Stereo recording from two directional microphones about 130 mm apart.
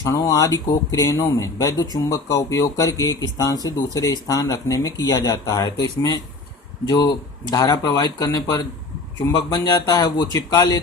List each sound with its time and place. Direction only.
0.0 s speech: 25° left (ahead or behind)